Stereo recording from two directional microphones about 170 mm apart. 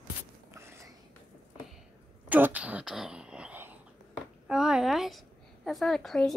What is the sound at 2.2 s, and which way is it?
Throat clearing, 10° right (ahead or behind).